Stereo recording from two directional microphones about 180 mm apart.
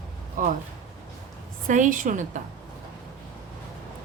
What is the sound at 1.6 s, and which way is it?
Speech, 45° right (ahead or behind).